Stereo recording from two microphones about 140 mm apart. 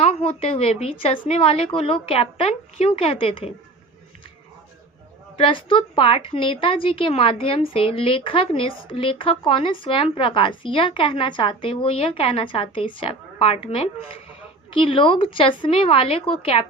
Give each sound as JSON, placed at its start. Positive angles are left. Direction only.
{"t": 0.0, "sound": "a woman's voice", "side_deg": 45}
{"t": 5.4, "sound": "a woman's voice", "side_deg": 40}
{"t": 14.7, "sound": "a woman's voice", "side_deg": 40}